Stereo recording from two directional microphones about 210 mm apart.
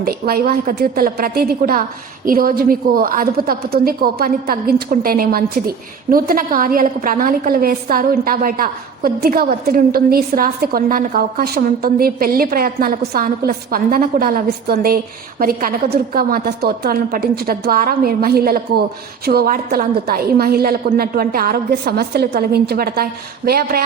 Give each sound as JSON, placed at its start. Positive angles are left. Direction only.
{"t": 0.0, "sound": "a woman's voice", "side_deg": -45}